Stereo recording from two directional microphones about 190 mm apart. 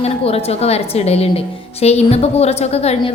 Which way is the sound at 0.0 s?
30° left (ahead or behind).